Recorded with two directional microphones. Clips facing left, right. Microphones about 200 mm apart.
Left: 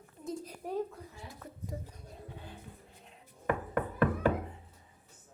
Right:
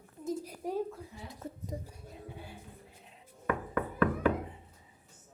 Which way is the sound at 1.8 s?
10° right (ahead or behind).